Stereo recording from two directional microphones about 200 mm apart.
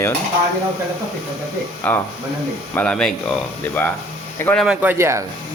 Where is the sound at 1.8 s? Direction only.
10° left (ahead or behind).